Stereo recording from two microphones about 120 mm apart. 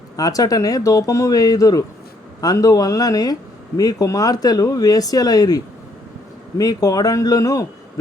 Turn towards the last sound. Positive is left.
turn(degrees=30)  # may be behind; listen again after turning